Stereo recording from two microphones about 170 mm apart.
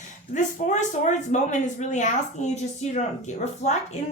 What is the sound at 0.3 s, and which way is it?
A woman's voice, 45° left (ahead or behind).